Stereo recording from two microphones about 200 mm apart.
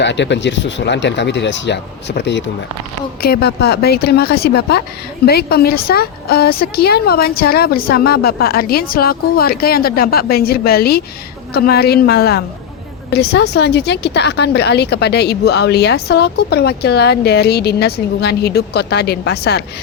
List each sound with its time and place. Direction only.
0.0 s a woman's voice: 60° left (ahead or behind)